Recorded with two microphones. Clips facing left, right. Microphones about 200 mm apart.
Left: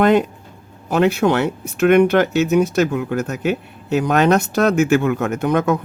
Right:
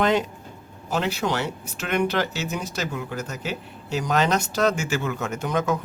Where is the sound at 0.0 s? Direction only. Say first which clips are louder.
Left 7 dB; 55° left (ahead or behind).